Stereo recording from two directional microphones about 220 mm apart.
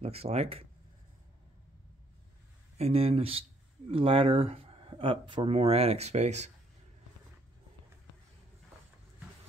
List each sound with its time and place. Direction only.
0.0 s speech: 30° right (ahead or behind)
2.8 s speech: 25° right (ahead or behind)